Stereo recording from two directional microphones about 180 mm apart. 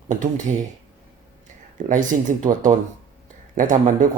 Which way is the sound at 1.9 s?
45° right (ahead or behind).